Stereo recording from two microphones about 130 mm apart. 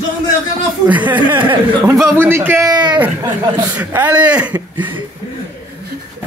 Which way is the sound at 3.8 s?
10° right (ahead or behind).